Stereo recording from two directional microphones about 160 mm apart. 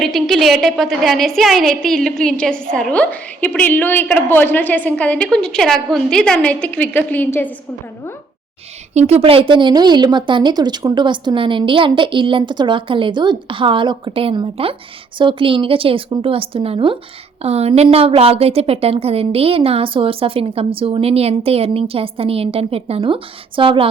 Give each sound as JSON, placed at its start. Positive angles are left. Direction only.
{"t": 0.0, "sound": "a woman's voice", "side_deg": 0}
{"t": 9.0, "sound": "a woman's voice", "side_deg": -40}